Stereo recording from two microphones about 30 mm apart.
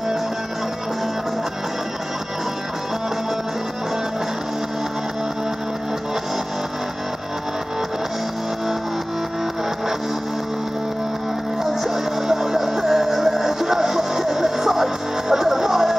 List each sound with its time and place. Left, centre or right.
11.6 s music: centre